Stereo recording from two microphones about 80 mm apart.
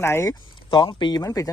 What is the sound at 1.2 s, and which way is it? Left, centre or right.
Speech, left.